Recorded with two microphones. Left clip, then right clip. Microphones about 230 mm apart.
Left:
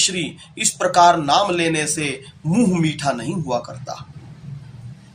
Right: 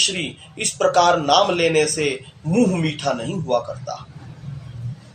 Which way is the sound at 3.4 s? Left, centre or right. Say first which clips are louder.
Right 4 dB; left.